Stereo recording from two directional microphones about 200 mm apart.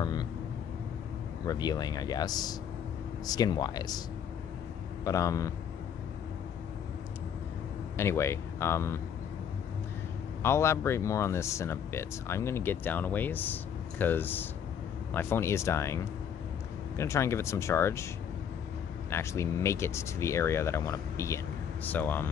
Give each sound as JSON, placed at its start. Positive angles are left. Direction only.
{"t": 0.0, "sound": "vehicle", "side_deg": 20}
{"t": 1.5, "sound": "speech", "side_deg": 20}
{"t": 5.0, "sound": "speech", "side_deg": 15}
{"t": 8.0, "sound": "speech", "side_deg": 15}
{"t": 10.4, "sound": "speech", "side_deg": 15}
{"t": 19.0, "sound": "speech", "side_deg": 15}